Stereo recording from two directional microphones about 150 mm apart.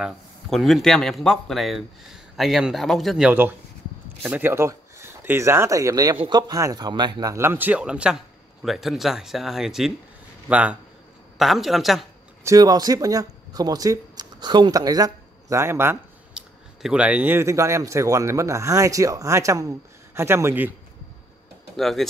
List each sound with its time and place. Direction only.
0.0 s speech: centre (ahead or behind)
3.3 s a man's voice: 10° right (ahead or behind)
12.4 s a man's voice: 25° right (ahead or behind)
21.7 s speech: centre (ahead or behind)